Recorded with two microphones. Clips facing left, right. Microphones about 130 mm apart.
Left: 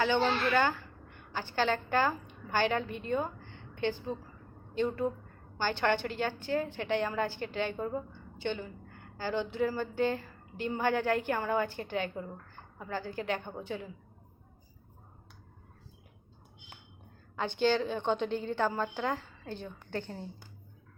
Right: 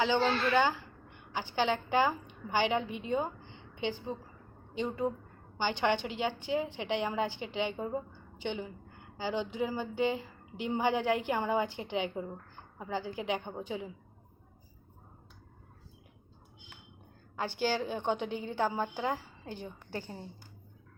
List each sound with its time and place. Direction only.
0.0 s a woman's voice: 15° right (ahead or behind)
17.3 s a woman's voice: 10° right (ahead or behind)